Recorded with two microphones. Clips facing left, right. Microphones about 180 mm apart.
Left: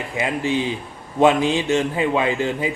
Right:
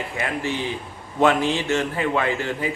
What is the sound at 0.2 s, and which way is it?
A man's voice, 15° left (ahead or behind).